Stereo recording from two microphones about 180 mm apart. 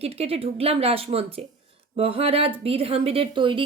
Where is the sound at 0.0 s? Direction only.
35° right (ahead or behind).